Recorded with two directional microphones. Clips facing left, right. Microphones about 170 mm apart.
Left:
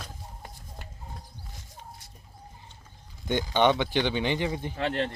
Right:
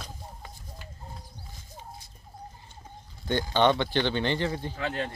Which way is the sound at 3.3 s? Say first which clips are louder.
Even; 15° left (ahead or behind).